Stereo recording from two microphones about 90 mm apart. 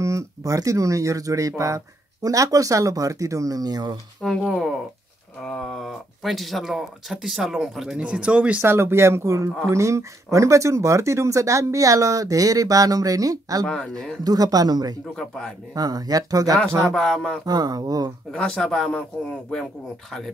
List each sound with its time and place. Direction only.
0.0 s speech: 35° right (ahead or behind)
4.2 s speech: 5° left (ahead or behind); by 8.6 s 15° right (ahead or behind)
8.6 s speech: 30° right (ahead or behind)
13.7 s speech: 10° left (ahead or behind)
14.2 s speech: 45° right (ahead or behind)
15.1 s speech: 5° left (ahead or behind)
15.7 s speech: 45° right (ahead or behind)
16.8 s speech: 5° left (ahead or behind)
17.5 s speech: 45° right (ahead or behind)
18.3 s speech: 10° left (ahead or behind)